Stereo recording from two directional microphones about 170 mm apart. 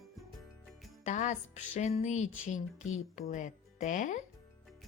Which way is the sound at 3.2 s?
45° left (ahead or behind).